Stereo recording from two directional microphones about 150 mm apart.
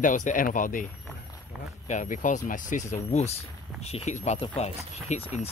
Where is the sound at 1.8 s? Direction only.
55° left (ahead or behind).